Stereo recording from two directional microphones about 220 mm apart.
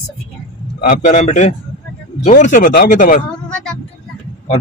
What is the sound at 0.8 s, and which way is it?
Speech, 35° left (ahead or behind).